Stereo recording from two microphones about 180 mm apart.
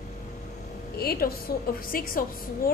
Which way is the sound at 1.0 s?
60° left (ahead or behind).